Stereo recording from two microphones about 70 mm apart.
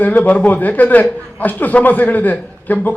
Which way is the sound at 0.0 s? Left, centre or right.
Left.